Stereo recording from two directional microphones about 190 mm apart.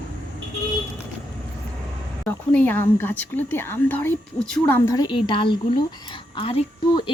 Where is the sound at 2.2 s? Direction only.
10° left (ahead or behind).